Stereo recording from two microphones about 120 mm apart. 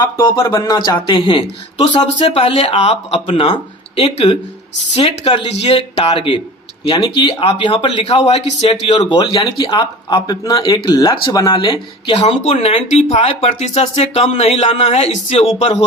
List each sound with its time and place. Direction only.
0.6 s speech: 35° left (ahead or behind)
2.2 s speech: 55° left (ahead or behind)
8.0 s speech: 65° left (ahead or behind)
8.6 s speech: 45° left (ahead or behind); by 11.5 s 30° left (ahead or behind)
11.5 s speech: 40° left (ahead or behind)
12.1 s speech: 60° left (ahead or behind)